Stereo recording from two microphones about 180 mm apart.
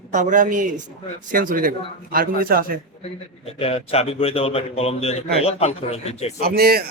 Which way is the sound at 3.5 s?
35° left (ahead or behind).